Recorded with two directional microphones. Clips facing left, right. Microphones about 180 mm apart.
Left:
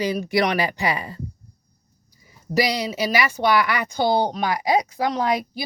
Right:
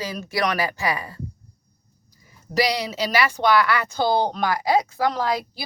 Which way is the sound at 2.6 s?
10° left (ahead or behind).